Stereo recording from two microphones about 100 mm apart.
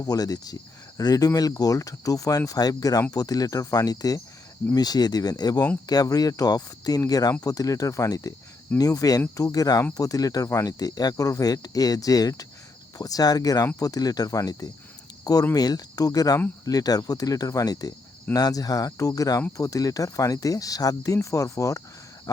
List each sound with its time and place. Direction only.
0.0 s speech: 40° left (ahead or behind)